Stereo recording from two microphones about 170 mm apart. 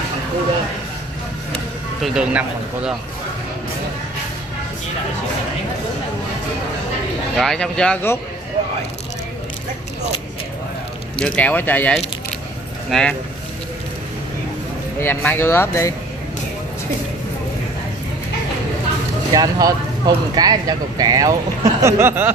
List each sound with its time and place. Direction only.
1.5 s a sound: centre (ahead or behind)
7.3 s speech: 5° left (ahead or behind)
11.1 s speech: 5° left (ahead or behind)
15.0 s speech: 10° left (ahead or behind)
19.3 s speech: 20° right (ahead or behind)